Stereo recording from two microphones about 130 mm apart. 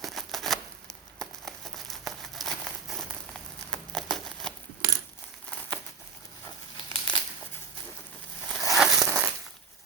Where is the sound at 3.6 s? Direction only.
5° left (ahead or behind).